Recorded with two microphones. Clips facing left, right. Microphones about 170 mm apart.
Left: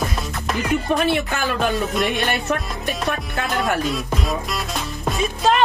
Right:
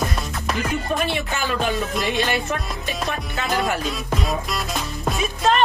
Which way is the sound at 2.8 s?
55° left (ahead or behind).